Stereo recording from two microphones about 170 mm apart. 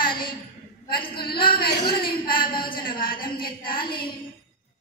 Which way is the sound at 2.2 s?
30° left (ahead or behind).